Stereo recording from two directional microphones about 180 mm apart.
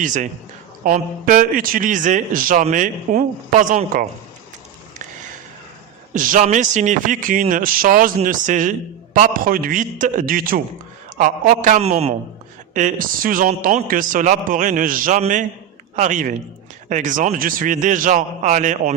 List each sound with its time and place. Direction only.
0.0 s a man's voice: 45° right (ahead or behind)
6.1 s a man's voice: 50° right (ahead or behind)
12.7 s a man's voice: 45° right (ahead or behind)